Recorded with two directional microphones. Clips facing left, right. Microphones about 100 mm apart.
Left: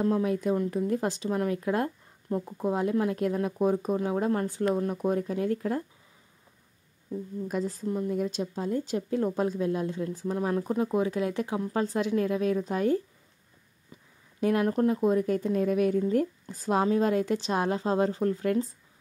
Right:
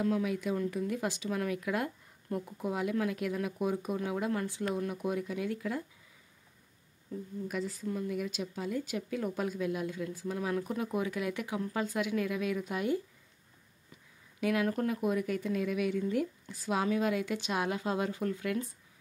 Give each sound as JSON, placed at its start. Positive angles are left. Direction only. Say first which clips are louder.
{"t": 0.0, "sound": "speech", "louder": "left 5 dB", "side_deg": 35}
{"t": 7.4, "sound": "speech", "louder": "left 5 dB", "side_deg": 35}
{"t": 14.4, "sound": "speech", "louder": "left 6 dB", "side_deg": 35}